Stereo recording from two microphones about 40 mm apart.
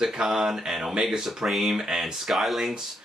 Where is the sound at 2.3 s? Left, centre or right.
Centre.